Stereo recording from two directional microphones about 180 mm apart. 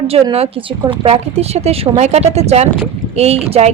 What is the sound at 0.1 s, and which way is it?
A woman's voice, 35° right (ahead or behind).